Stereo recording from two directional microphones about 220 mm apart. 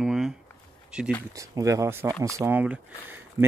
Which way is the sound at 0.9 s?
5° right (ahead or behind).